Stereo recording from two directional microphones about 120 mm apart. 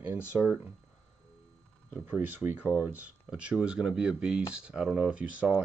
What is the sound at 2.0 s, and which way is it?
Speech, 15° right (ahead or behind).